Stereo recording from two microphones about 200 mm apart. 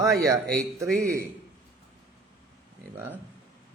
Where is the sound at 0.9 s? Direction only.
45° right (ahead or behind).